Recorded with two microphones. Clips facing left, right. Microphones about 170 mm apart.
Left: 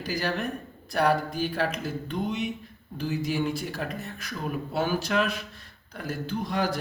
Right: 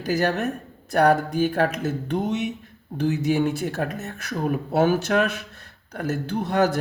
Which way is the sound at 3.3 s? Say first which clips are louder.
Right 6 dB; 50° right (ahead or behind).